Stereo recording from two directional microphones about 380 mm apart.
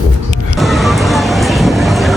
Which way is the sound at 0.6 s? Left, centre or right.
Centre.